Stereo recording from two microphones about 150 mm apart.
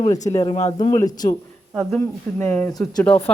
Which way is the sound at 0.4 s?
45° left (ahead or behind).